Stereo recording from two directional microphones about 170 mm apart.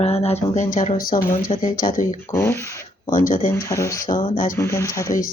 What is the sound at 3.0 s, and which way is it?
Speech, 55° left (ahead or behind).